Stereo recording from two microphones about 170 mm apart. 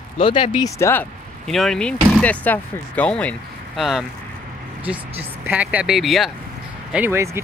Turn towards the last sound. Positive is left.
turn(degrees=-15)  # may be behind; listen again after turning